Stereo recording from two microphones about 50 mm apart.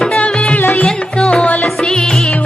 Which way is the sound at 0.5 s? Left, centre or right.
Left.